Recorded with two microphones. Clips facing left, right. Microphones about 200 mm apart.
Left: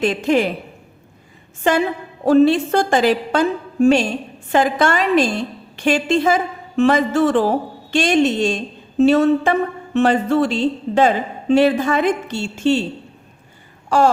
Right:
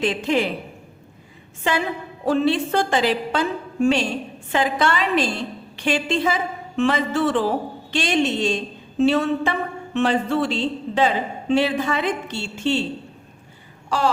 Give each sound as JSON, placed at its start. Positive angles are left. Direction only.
{"t": 0.0, "sound": "a woman's voice", "side_deg": 45}
{"t": 1.7, "sound": "a woman's voice", "side_deg": 45}
{"t": 13.9, "sound": "a woman's voice", "side_deg": 45}